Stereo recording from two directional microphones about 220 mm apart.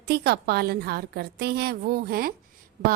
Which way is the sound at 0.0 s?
45° right (ahead or behind).